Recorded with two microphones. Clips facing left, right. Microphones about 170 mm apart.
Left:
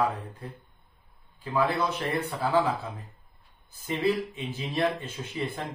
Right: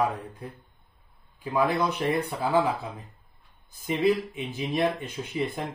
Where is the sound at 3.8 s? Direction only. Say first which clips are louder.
Right 3 dB; 15° right (ahead or behind).